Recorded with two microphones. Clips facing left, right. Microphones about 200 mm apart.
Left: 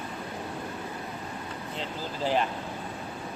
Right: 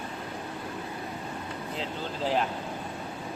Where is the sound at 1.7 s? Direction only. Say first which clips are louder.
Right 1 dB; centre (ahead or behind).